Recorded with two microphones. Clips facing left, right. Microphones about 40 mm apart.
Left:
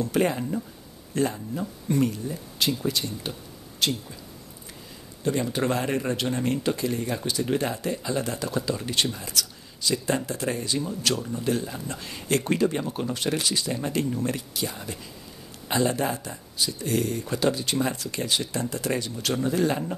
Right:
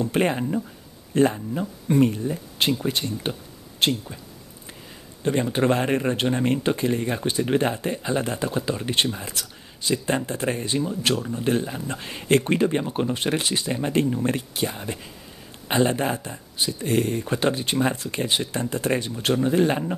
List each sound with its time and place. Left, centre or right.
0.0 s speech: right
5.2 s speech: right